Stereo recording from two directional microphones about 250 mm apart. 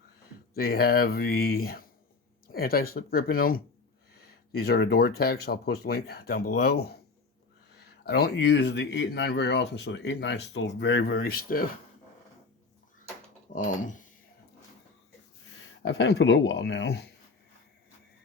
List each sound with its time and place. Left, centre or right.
0.5 s speech: left
8.0 s speech: left
13.5 s speech: left
15.8 s speech: left